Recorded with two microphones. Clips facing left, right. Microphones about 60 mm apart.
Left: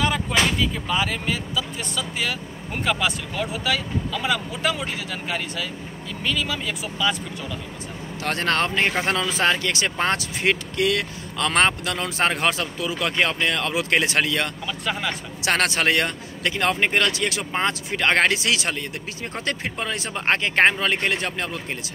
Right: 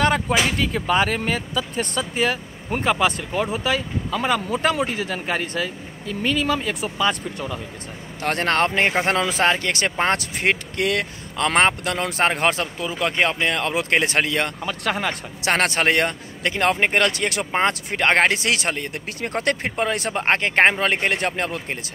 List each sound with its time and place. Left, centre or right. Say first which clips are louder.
0.7 s speech: right 5 dB; right
12.9 s speech: right 2 dB; right